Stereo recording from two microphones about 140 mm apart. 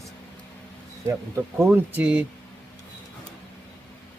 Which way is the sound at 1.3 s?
15° right (ahead or behind).